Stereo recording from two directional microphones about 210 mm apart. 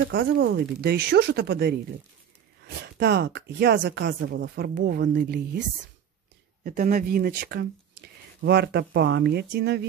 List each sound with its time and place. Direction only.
0.1 s speech: 55° right (ahead or behind)
3.0 s speech: 55° right (ahead or behind)
6.6 s speech: 35° right (ahead or behind)